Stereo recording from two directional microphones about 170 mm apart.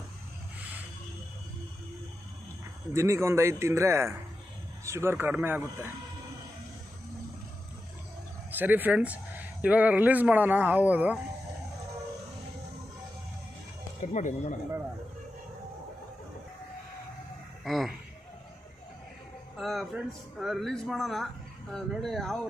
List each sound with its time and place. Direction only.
2.9 s speech: 15° right (ahead or behind)
8.5 s speech: 10° right (ahead or behind)
14.0 s speech: 45° left (ahead or behind)
17.6 s speech: centre (ahead or behind)
19.5 s speech: centre (ahead or behind)